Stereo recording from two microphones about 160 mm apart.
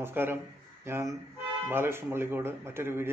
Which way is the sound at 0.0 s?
15° right (ahead or behind).